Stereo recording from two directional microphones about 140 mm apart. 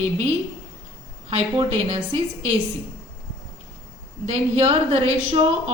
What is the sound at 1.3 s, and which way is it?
A woman's voice, 40° right (ahead or behind).